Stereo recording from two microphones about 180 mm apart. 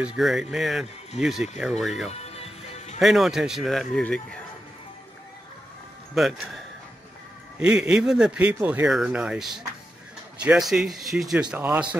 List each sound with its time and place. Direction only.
0.0 s speech: 5° right (ahead or behind)
2.0 s music: 35° left (ahead or behind)
3.0 s speech: centre (ahead or behind)
6.1 s speech: centre (ahead or behind)